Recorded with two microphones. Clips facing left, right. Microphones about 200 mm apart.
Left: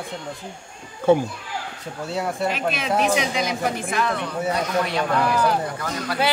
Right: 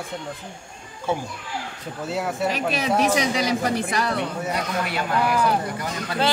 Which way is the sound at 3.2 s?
35° right (ahead or behind).